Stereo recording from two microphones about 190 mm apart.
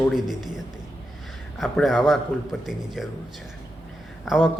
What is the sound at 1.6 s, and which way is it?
Speech, centre (ahead or behind).